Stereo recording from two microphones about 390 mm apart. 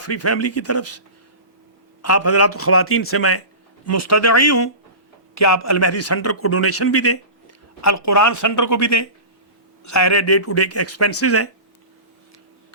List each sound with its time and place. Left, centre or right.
0.0 s a man's voice: left